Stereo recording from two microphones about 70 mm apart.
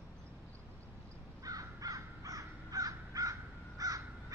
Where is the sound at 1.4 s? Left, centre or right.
Right.